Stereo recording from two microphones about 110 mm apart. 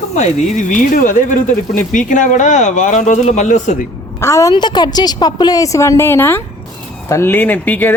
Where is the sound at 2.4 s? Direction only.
90° left.